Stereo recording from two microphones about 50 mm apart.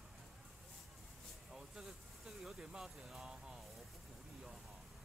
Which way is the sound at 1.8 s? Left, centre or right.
Centre.